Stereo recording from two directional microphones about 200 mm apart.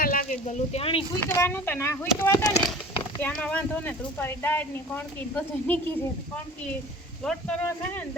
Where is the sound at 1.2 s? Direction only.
10° left (ahead or behind).